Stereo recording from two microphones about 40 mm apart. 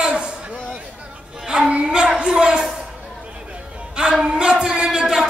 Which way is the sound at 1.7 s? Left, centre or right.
Right.